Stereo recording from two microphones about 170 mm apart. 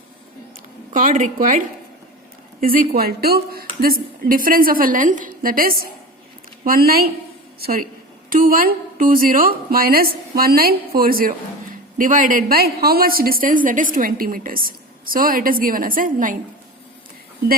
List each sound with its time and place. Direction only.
0.9 s a woman's voice: 50° right (ahead or behind)